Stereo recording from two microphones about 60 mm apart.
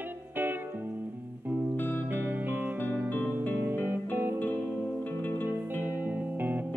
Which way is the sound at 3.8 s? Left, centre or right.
Right.